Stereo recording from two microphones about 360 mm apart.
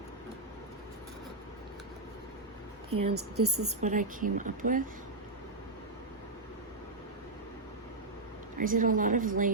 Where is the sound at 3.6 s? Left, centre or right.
Right.